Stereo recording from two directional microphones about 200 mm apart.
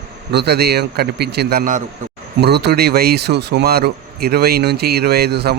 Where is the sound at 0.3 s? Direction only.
55° right (ahead or behind).